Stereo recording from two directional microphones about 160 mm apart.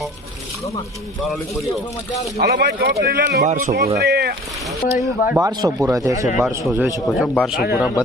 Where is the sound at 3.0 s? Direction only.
65° right (ahead or behind); by 3.8 s 50° right (ahead or behind).